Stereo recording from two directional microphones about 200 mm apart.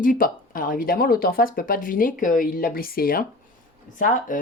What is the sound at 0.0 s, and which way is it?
Speech, 45° left (ahead or behind).